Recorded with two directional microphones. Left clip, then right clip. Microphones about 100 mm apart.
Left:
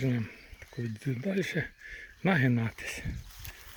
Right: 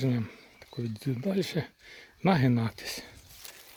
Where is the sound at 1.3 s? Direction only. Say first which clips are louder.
Left 1 dB; 30° right (ahead or behind).